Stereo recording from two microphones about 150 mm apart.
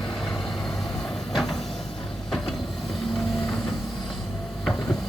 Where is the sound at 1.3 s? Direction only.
Centre (ahead or behind).